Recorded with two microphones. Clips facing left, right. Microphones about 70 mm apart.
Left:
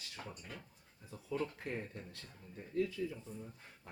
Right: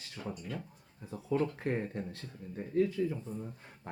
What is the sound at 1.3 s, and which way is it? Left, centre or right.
Speech, right.